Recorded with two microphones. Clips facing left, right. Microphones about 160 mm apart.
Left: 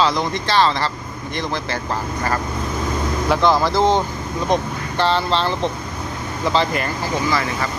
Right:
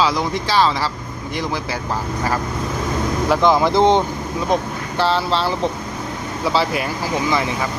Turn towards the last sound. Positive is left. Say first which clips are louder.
# right 1 dB
turn(degrees=-20)  # may be behind; listen again after turning